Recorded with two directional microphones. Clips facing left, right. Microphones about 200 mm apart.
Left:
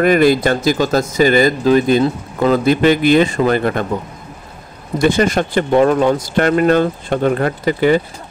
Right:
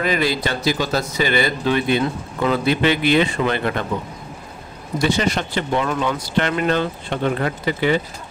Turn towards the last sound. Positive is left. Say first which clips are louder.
# left 6 dB
turn(degrees=45)  # may be behind; listen again after turning